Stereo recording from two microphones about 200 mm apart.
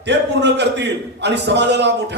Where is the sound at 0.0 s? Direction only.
60° right (ahead or behind).